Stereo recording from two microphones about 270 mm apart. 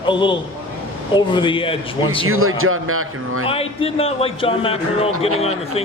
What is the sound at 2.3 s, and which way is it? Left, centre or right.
Speech, right.